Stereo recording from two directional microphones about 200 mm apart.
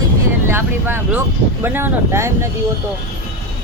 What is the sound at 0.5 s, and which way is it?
Speech, 10° right (ahead or behind).